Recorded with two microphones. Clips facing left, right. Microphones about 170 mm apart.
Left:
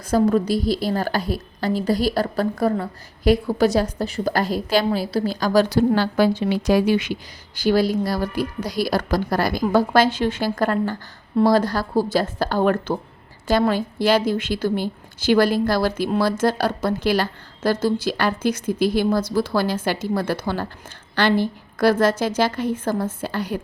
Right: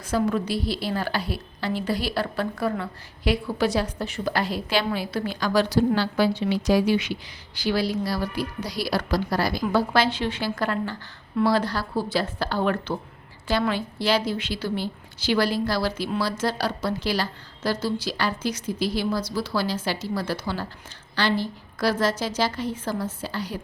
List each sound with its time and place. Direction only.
0.0 s a woman's voice: 40° left (ahead or behind)